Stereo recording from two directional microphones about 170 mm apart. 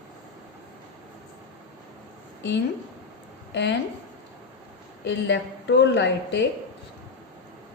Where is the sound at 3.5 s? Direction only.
90° left.